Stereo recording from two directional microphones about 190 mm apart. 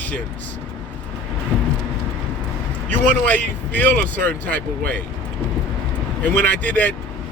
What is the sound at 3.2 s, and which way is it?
Speech, 10° left (ahead or behind).